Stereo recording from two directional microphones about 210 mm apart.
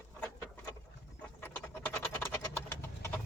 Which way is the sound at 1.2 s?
5° left (ahead or behind).